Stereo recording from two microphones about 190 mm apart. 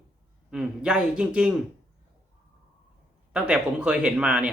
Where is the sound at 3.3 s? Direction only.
5° right (ahead or behind).